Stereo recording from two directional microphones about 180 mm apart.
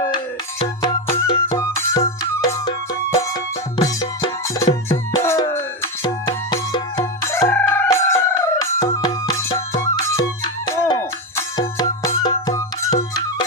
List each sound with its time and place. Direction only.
1.1 s music: 20° left (ahead or behind)
3.8 s music: 20° left (ahead or behind)